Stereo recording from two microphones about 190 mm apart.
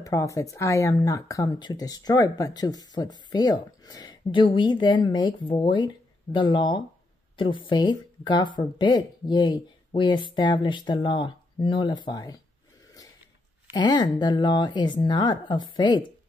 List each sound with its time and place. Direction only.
0.0 s speech: 15° left (ahead or behind)
13.7 s speech: 20° left (ahead or behind)